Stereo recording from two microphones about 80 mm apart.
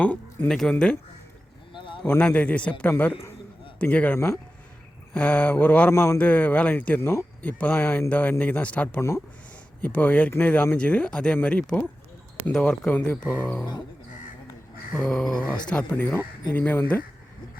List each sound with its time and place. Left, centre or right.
0.0 s speech: centre
0.4 s a man's voice: centre
1.7 s a sound: left
2.0 s a man's voice: centre
3.8 s a man's voice: centre
5.9 s a man's voice: left
6.1 s speech: centre
7.0 s a man's voice: left
7.4 s a man's voice: left
9.0 s a man's voice: left
9.8 s a man's voice: centre
13.3 s speech: left
14.9 s a man's voice: centre